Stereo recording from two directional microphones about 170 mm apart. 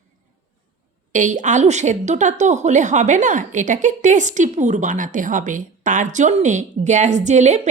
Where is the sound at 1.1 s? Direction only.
45° right (ahead or behind).